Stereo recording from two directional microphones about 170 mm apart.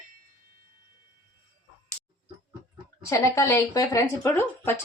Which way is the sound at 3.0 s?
15° left (ahead or behind).